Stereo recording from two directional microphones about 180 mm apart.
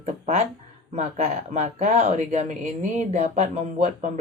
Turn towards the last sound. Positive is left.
turn(degrees=-40)  # may be behind; listen again after turning